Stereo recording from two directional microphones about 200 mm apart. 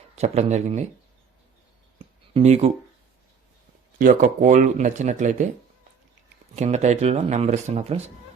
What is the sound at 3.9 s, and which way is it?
A man's voice, 40° right (ahead or behind).